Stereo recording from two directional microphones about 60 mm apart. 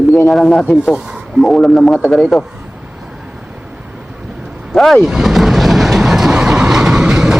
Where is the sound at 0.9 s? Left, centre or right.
Centre.